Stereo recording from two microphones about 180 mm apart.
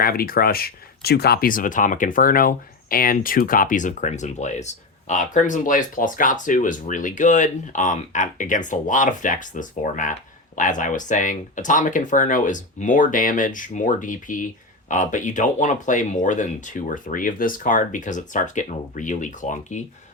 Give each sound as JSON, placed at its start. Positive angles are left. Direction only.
{"t": 0.0, "sound": "speech", "side_deg": 55}